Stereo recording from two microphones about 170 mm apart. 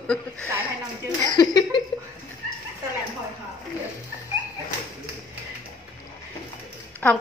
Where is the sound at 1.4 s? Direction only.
25° left (ahead or behind).